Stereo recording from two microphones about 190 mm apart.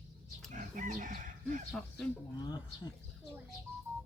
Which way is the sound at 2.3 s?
20° left (ahead or behind).